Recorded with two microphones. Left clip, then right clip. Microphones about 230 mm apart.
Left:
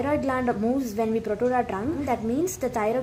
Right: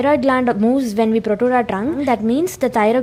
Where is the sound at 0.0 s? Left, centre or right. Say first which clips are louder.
Right 10 dB; right.